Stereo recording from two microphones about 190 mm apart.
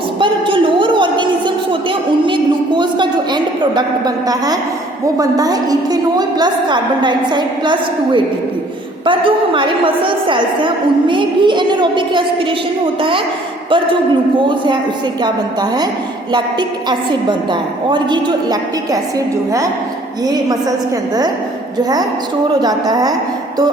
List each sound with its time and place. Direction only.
0.2 s a sound: 25° right (ahead or behind)
5.1 s a woman's voice: 20° right (ahead or behind)
14.4 s a woman's voice: 25° right (ahead or behind)
16.3 s a woman's voice: 25° right (ahead or behind)
20.2 s a woman's voice: 20° right (ahead or behind)
22.6 s a woman's voice: 20° right (ahead or behind)